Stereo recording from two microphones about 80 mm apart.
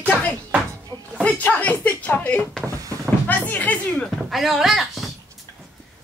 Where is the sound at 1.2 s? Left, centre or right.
Centre.